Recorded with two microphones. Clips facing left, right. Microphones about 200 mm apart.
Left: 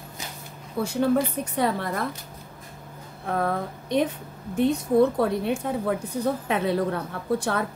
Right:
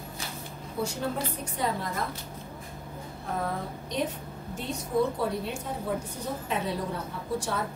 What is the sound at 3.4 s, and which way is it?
A woman's voice, 60° left (ahead or behind).